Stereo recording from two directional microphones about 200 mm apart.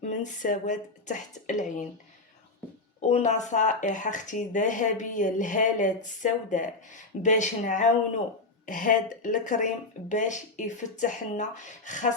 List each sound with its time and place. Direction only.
0.0 s speech: 40° left (ahead or behind)
3.1 s speech: 35° left (ahead or behind)